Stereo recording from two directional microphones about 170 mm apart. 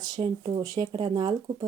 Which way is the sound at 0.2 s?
30° right (ahead or behind).